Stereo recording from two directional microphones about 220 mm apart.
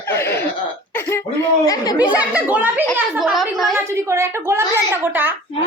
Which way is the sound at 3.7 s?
10° right (ahead or behind).